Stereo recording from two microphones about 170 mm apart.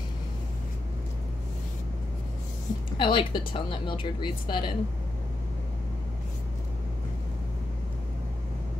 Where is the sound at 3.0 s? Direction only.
25° left (ahead or behind).